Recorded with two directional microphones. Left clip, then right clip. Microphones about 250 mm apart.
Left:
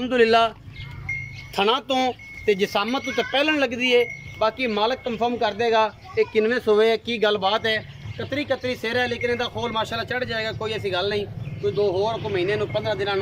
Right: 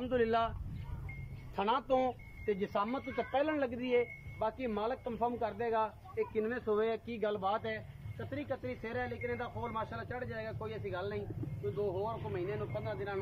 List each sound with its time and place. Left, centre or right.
0.0 s speech: left
1.5 s speech: left
11.7 s speech: left
12.8 s speech: left